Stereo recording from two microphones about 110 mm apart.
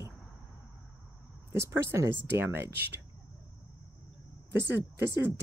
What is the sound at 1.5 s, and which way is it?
Speech, 25° right (ahead or behind).